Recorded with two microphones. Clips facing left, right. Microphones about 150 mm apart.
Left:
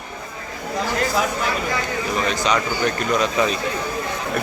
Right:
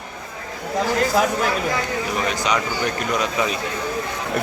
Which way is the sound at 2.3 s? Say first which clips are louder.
Left 1 dB; 10° right (ahead or behind).